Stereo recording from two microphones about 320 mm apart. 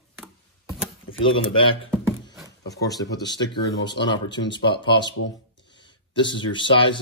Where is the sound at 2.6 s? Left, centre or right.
Centre.